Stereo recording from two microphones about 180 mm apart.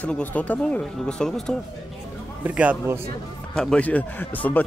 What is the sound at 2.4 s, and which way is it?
Speech, 10° right (ahead or behind).